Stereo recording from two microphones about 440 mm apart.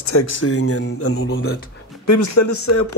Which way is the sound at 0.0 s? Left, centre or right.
Left.